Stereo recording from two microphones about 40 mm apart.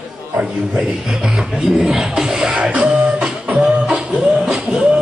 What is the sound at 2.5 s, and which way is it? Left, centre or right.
Music, right.